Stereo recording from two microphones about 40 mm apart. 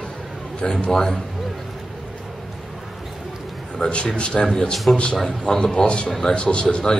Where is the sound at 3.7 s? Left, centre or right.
Left.